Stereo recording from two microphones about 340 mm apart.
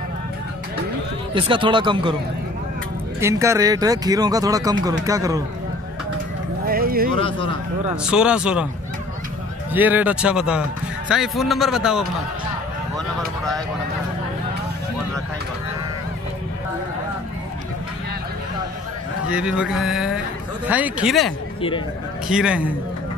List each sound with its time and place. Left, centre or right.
1.3 s speech: centre
3.2 s speech: centre
6.6 s a sound: right
7.2 s speech: centre
7.9 s a man's voice: centre
9.7 s a man's voice: centre
19.3 s a man's voice: centre
21.5 s speech: centre
22.3 s a man's voice: centre